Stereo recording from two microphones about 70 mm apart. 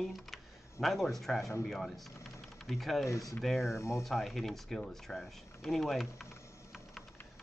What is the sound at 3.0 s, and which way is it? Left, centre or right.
Speech, left.